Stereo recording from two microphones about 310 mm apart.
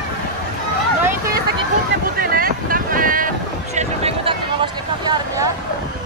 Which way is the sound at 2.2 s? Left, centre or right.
Right.